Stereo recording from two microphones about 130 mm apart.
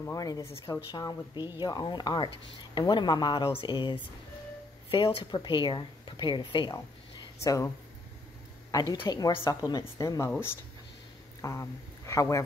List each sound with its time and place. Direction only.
0.0 s a woman's voice: 25° left (ahead or behind)
0.9 s speech: 35° left (ahead or behind)
7.4 s a woman's voice: 25° left (ahead or behind)
8.9 s a woman's voice: 35° left (ahead or behind)
11.4 s a woman's voice: 25° left (ahead or behind)